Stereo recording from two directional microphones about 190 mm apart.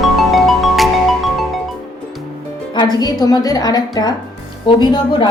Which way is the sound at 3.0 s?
20° left (ahead or behind).